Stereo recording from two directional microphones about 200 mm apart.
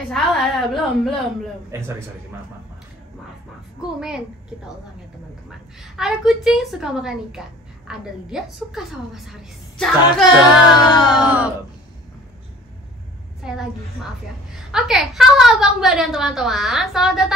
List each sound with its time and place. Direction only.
0.1 s a woman's voice: centre (ahead or behind)
1.7 s a man's voice: 15° right (ahead or behind)
3.8 s a woman's voice: 5° right (ahead or behind)
5.9 s a woman's voice: centre (ahead or behind)
13.4 s a woman's voice: 5° right (ahead or behind)